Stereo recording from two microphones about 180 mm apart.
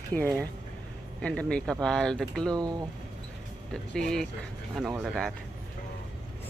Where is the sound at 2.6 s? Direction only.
20° right (ahead or behind).